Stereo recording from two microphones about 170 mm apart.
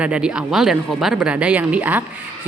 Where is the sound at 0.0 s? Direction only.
5° right (ahead or behind).